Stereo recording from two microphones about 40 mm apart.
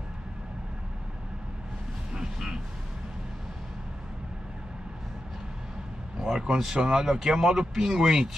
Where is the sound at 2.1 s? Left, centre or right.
Centre.